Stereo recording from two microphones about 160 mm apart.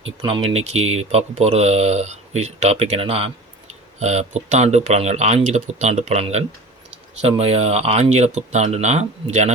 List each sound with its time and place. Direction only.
0.3 s speech: 35° right (ahead or behind)